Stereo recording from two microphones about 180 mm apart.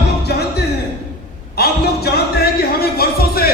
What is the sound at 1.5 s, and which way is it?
Music, 60° left (ahead or behind).